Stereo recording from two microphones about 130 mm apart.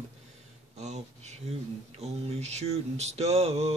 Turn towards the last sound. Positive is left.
turn(degrees=-55)  # may be behind; listen again after turning